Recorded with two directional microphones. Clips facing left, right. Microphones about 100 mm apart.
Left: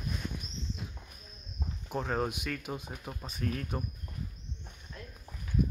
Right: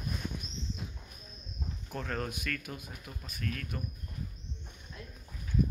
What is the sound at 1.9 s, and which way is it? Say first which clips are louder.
Speech: left 5 dB; 15° left (ahead or behind).